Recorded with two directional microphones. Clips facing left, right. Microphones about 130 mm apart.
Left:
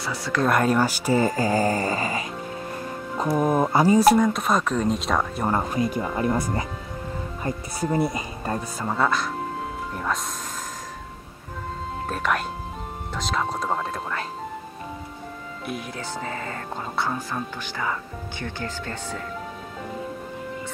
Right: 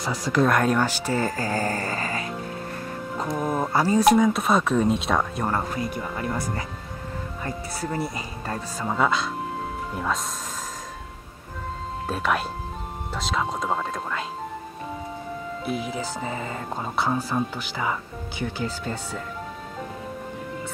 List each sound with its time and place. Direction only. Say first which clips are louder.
0.4 s speech: even; centre (ahead or behind)
3.3 s speech: left 6 dB; 10° left (ahead or behind)
4.1 s speech: right 1 dB; centre (ahead or behind)
5.5 s speech: left 3 dB; 20° left (ahead or behind)
8.8 s speech: right 1 dB; centre (ahead or behind)
12.1 s speech: right 1 dB; centre (ahead or behind)
15.9 s speech: right 2 dB; 10° right (ahead or behind)